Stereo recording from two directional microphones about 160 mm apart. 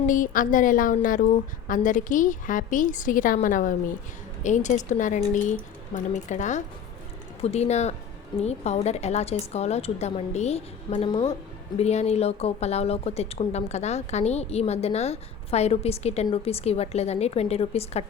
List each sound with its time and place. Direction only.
0.1 s a woman's voice: 55° left (ahead or behind); by 18.0 s 40° left (ahead or behind)